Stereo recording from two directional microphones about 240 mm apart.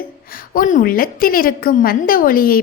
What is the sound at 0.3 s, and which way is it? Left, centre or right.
A woman's voice, left.